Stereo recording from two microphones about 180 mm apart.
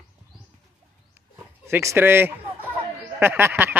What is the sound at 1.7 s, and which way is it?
Speech, 15° right (ahead or behind).